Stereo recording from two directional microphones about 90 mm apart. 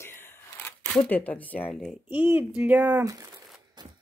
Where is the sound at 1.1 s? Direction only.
15° left (ahead or behind).